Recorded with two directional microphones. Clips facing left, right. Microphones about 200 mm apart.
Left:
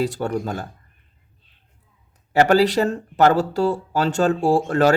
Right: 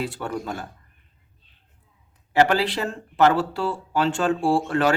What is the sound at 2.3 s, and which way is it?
Speech, 40° left (ahead or behind).